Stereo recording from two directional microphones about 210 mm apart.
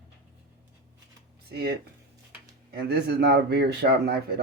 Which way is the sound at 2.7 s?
50° right (ahead or behind).